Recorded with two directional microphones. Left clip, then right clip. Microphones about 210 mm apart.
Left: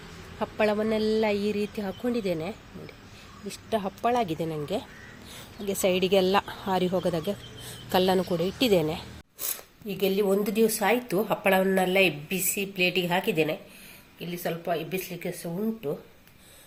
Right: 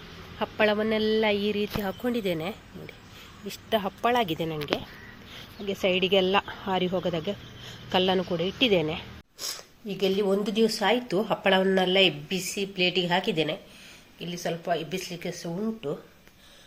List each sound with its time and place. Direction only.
0.3 s a woman's voice: centre (ahead or behind)
5.6 s speech: 10° left (ahead or behind)
9.4 s a woman's voice: centre (ahead or behind)